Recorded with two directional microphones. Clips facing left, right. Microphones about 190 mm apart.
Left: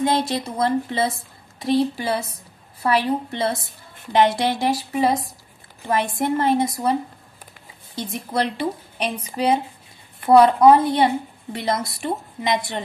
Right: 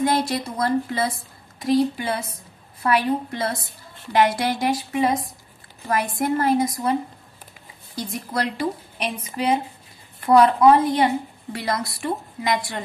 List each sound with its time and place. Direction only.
0.0 s a woman's voice: 25° left (ahead or behind)